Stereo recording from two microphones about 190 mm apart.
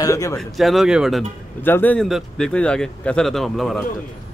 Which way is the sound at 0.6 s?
Centre (ahead or behind).